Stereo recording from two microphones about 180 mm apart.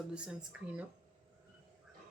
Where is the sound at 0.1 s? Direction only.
5° right (ahead or behind).